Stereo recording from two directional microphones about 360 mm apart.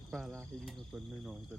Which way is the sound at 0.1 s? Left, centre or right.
Centre.